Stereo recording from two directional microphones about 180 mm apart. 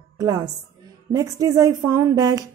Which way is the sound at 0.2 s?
20° right (ahead or behind).